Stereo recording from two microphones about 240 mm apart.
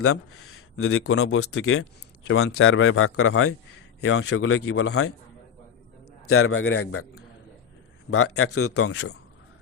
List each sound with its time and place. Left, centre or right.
0.0 s speech: left
6.2 s speech: left